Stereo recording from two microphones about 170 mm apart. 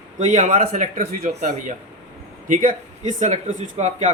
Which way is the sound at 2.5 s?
50° right (ahead or behind).